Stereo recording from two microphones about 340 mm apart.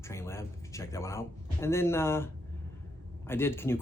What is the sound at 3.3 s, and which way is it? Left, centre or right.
Speech, centre.